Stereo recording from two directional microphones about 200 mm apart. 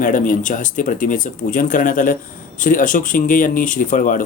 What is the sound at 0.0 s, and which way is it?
Speech, 40° left (ahead or behind).